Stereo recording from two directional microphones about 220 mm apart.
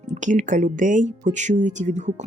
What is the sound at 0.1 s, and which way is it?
Speech, 35° right (ahead or behind).